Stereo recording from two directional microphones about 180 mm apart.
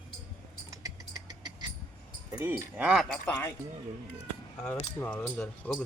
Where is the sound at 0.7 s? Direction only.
20° right (ahead or behind).